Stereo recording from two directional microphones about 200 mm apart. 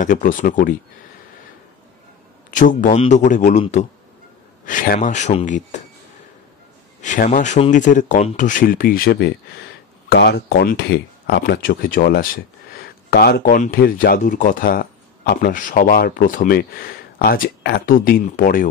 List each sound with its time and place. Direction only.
0.0 s speech: 40° left (ahead or behind)
2.5 s speech: 40° left (ahead or behind)
7.0 s speech: 40° left (ahead or behind)